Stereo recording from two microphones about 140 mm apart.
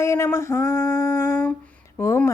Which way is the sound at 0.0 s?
20° left (ahead or behind).